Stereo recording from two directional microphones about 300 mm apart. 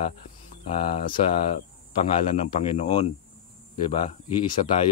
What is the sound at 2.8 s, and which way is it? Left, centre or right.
Speech, centre.